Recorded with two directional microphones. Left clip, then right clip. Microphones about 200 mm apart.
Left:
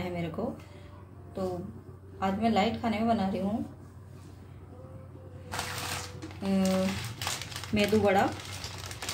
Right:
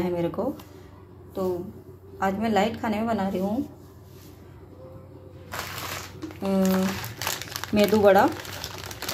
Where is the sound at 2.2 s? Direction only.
25° right (ahead or behind).